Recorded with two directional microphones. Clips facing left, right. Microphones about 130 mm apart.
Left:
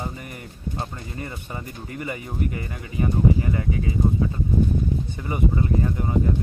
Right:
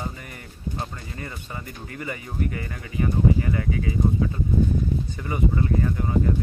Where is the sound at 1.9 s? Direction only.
25° left (ahead or behind).